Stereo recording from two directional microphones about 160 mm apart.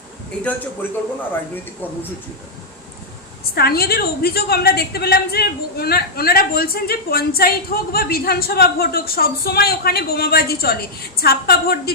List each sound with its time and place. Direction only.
3.5 s a woman's voice: 75° left (ahead or behind)